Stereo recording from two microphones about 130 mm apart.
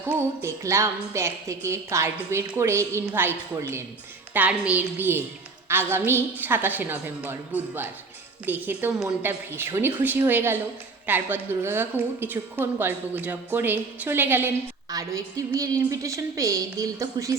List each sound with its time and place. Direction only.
0.1 s a woman's voice: 20° right (ahead or behind)
4.4 s a woman's voice: 10° right (ahead or behind)
14.8 s a woman's voice: 30° right (ahead or behind)